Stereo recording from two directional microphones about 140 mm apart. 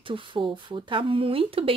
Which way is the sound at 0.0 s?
35° right (ahead or behind).